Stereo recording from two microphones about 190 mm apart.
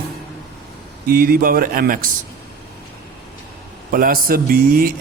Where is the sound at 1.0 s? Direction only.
50° right (ahead or behind).